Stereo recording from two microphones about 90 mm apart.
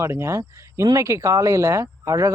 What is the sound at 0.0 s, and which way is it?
Speech, 30° right (ahead or behind).